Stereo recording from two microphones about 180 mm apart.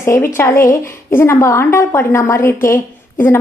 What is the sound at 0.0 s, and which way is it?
A woman's voice, 15° left (ahead or behind).